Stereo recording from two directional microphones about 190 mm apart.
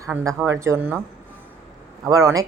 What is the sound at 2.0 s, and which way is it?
Speech, 15° right (ahead or behind).